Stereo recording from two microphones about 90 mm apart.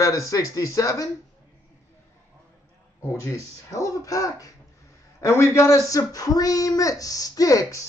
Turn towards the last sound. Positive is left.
turn(degrees=40)  # may be behind; listen again after turning